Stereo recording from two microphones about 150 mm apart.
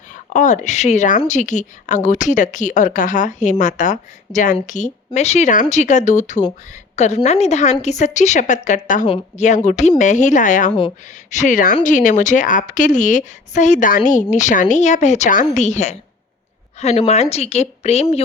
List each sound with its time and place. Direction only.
0.1 s a woman's voice: 55° left (ahead or behind)
10.7 s speech: 35° left (ahead or behind)
11.3 s speech: 55° left (ahead or behind)
17.1 s a woman's voice: 45° left (ahead or behind)